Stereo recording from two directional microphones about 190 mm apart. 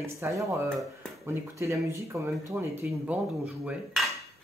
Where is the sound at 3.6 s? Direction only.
Centre (ahead or behind).